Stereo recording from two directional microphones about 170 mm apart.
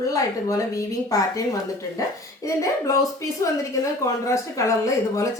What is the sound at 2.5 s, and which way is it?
A woman's voice, 20° left (ahead or behind).